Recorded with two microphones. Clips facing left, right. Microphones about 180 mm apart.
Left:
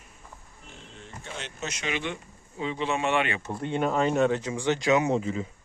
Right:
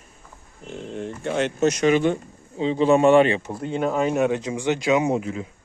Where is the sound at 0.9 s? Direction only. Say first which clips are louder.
Right 15 dB; 60° right (ahead or behind); by 2.2 s 40° right (ahead or behind).